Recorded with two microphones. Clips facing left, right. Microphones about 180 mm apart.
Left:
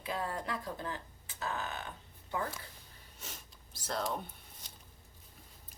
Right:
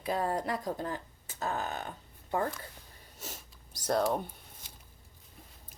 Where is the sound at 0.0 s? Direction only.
45° right (ahead or behind).